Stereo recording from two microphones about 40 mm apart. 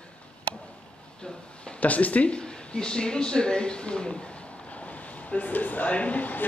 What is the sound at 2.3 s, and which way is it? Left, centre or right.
Speech, left.